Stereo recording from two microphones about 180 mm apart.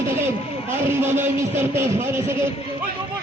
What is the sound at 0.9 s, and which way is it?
Speech, 15° right (ahead or behind).